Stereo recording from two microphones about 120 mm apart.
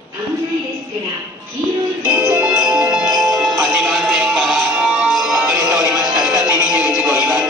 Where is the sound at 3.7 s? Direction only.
5° right (ahead or behind).